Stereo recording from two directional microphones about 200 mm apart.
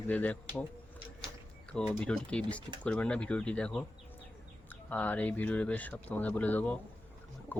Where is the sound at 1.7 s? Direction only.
5° left (ahead or behind).